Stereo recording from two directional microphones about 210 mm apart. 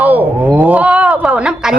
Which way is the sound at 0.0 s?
10° right (ahead or behind).